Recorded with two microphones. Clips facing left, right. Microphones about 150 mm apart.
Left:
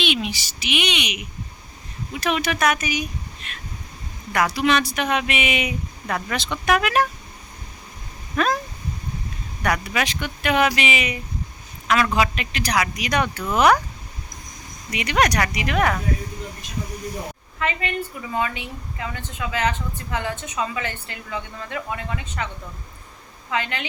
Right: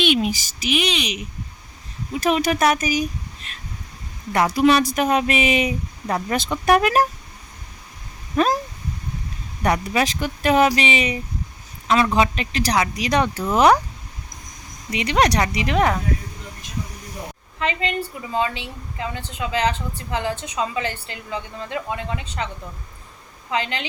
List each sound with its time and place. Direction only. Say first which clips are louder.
0.0 s a woman's voice: right 5 dB; 45° right (ahead or behind); by 4.5 s 30° right (ahead or behind)
4.5 s speech: right 4 dB; 40° right (ahead or behind)
9.8 s a woman's voice: right 4 dB; 35° right (ahead or behind)
14.8 s a woman's voice: right 2 dB; 25° right (ahead or behind)
17.6 s a woman's voice: right 2 dB; 25° right (ahead or behind)
23.5 s a woman's voice: right 2 dB; 25° right (ahead or behind)